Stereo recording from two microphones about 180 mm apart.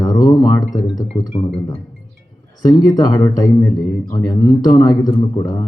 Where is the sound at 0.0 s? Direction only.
20° left (ahead or behind).